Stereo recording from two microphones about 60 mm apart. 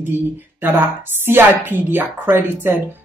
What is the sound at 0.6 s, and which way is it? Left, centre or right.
Speech, right.